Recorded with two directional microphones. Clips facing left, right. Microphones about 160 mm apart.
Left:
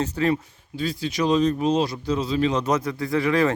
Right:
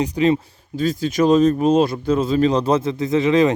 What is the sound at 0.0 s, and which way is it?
Speech, 15° right (ahead or behind).